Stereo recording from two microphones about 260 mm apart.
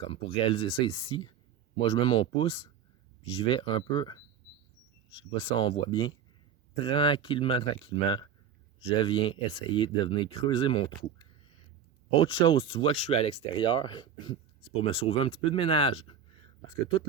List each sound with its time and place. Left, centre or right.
0.0 s speech: left
12.2 s speech: centre